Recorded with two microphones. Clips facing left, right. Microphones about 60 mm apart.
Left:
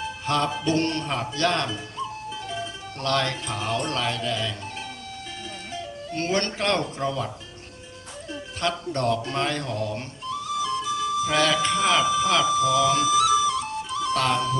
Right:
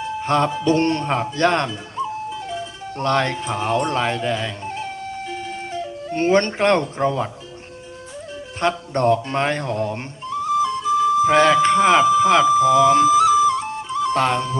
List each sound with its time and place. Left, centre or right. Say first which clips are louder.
0.2 s music: right 6 dB; right
0.7 s speech: right 7 dB; right
2.3 s music: right 4 dB; centre
3.0 s speech: right 5 dB; right
6.1 s speech: right 8 dB; right
8.6 s cat: right 6 dB; right